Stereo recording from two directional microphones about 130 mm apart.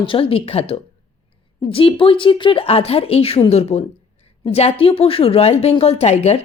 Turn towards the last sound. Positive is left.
turn(degrees=55)  # may be behind; listen again after turning